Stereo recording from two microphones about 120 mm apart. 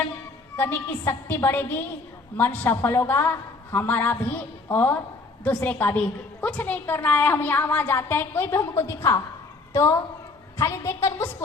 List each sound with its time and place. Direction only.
0.5 s a woman's voice: 15° left (ahead or behind)